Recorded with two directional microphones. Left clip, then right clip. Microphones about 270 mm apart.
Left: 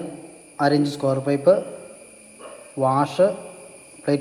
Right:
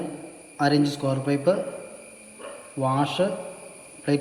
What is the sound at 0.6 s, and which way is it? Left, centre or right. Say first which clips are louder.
Speech: left 2 dB; centre.